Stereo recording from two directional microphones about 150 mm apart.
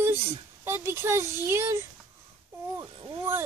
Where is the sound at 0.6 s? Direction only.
15° right (ahead or behind).